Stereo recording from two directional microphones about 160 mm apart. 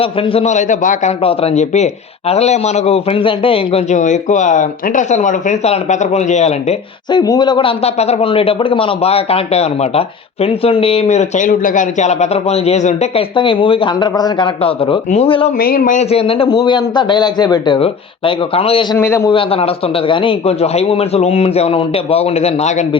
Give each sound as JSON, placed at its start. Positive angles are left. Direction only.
{"t": 0.0, "sound": "a man's voice", "side_deg": 35}
{"t": 1.2, "sound": "a man's voice", "side_deg": 35}
{"t": 7.1, "sound": "speech", "side_deg": 25}
{"t": 15.5, "sound": "speech", "side_deg": 65}
{"t": 18.9, "sound": "a man's voice", "side_deg": 15}
{"t": 19.3, "sound": "speech", "side_deg": 35}